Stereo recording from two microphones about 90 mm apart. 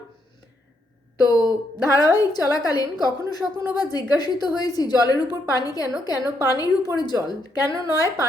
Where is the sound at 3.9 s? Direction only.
50° left (ahead or behind).